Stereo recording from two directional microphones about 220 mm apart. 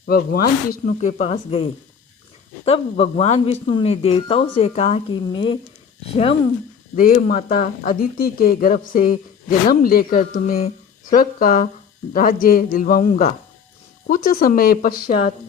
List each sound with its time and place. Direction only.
0.0 s speech: 45° left (ahead or behind); by 5.5 s 25° left (ahead or behind)
6.9 s speech: 40° left (ahead or behind)